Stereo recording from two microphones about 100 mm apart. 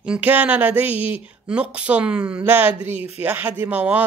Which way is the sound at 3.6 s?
15° right (ahead or behind).